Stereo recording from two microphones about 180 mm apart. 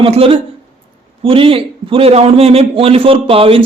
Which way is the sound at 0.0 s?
30° right (ahead or behind).